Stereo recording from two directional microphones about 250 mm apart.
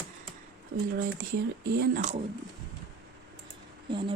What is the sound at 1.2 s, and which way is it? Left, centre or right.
Speech, right.